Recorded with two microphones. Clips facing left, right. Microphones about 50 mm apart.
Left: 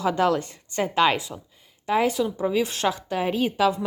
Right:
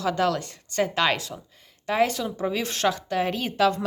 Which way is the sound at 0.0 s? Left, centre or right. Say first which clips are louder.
Left 2 dB; left.